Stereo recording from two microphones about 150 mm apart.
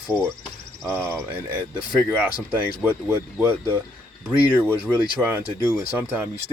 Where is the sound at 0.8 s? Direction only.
15° right (ahead or behind).